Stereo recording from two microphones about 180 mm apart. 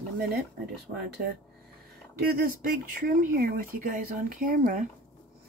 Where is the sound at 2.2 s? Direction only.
60° right (ahead or behind).